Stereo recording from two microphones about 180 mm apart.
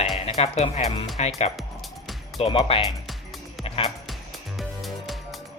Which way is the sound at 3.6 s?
35° left (ahead or behind).